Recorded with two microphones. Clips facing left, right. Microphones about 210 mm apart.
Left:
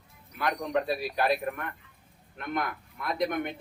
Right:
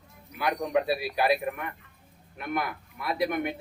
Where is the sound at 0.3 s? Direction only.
10° right (ahead or behind).